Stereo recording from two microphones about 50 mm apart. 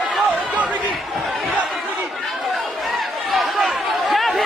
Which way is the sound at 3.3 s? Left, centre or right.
Centre.